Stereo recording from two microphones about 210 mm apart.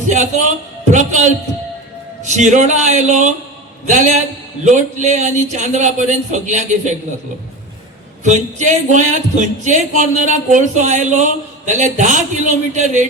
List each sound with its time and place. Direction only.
0.9 s a man's voice: 35° right (ahead or behind)
8.2 s speech: 35° right (ahead or behind)